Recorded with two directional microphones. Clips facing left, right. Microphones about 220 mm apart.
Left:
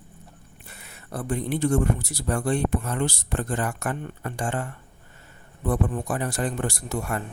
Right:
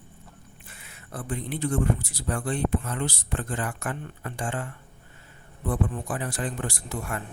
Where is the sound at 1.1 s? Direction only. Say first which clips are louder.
Left 5 dB; 40° left (ahead or behind).